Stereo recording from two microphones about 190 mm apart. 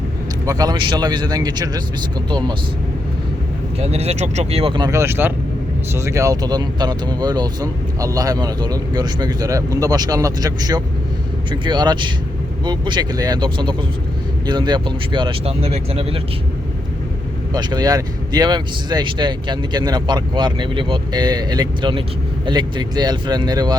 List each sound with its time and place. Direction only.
0.4 s speech: 20° right (ahead or behind)
3.8 s speech: 35° right (ahead or behind)
17.5 s speech: 20° right (ahead or behind)